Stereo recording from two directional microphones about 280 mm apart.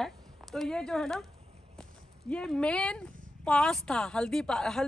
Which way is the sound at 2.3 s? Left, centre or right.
Centre.